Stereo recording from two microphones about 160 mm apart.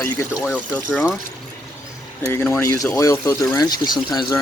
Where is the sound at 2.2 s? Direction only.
15° left (ahead or behind).